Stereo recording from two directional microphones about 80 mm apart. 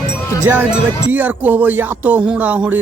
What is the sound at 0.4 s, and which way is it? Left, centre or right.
Speech, right.